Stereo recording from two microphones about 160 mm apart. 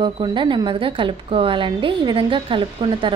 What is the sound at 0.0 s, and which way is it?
A woman's voice, 30° right (ahead or behind).